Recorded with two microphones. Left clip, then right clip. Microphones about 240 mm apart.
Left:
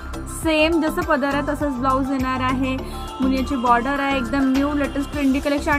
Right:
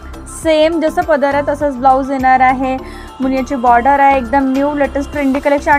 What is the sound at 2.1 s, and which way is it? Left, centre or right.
Music, centre.